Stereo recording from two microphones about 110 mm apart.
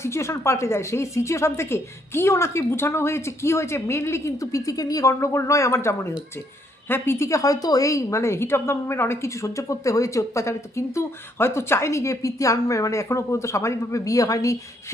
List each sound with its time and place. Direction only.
0.0 s a woman's voice: 25° left (ahead or behind)